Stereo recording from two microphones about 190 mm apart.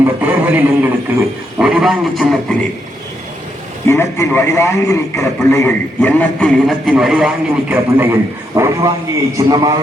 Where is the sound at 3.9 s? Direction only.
15° left (ahead or behind).